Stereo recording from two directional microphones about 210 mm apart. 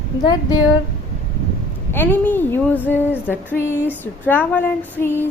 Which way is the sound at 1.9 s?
10° left (ahead or behind).